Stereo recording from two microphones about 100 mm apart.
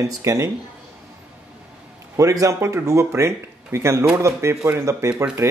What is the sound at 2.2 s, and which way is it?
Speech, 30° right (ahead or behind).